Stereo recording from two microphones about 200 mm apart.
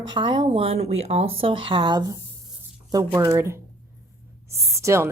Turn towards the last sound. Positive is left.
turn(degrees=-15)  # may be behind; listen again after turning